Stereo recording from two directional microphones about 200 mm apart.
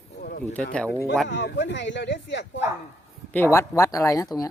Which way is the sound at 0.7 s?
10° left (ahead or behind).